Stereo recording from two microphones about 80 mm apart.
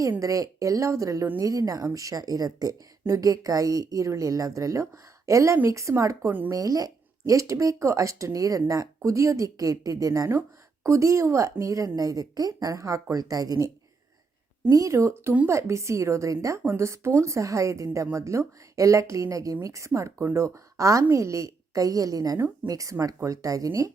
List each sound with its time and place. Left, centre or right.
0.2 s a woman's voice: right
14.7 s a woman's voice: right